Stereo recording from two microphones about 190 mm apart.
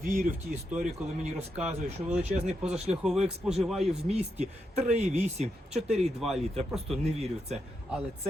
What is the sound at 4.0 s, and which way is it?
Speech, 35° right (ahead or behind).